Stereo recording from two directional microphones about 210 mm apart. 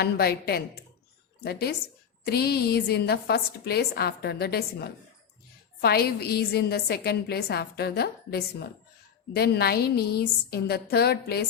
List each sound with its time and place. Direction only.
0.0 s a woman's voice: 50° left (ahead or behind)